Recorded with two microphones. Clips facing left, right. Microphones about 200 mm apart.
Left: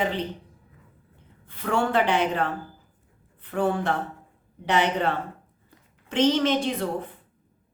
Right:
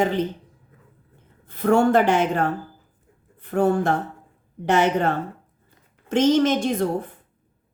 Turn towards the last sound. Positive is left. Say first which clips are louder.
# right 4 dB
turn(degrees=-45)  # may be behind; listen again after turning